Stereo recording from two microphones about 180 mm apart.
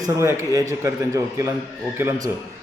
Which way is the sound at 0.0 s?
15° right (ahead or behind).